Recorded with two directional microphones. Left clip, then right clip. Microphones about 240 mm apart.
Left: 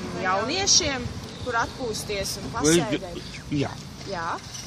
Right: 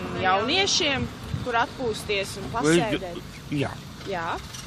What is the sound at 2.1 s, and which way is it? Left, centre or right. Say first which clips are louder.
Speech: right 2 dB; right.